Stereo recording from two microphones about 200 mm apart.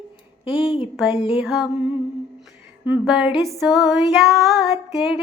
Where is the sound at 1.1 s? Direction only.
30° left (ahead or behind).